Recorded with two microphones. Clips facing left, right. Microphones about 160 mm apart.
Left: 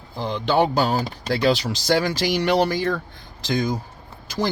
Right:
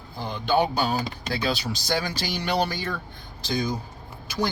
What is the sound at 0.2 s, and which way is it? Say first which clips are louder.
Speech: left 3 dB; 90° left.